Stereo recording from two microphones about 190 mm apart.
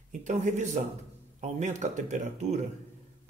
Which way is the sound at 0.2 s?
40° right (ahead or behind).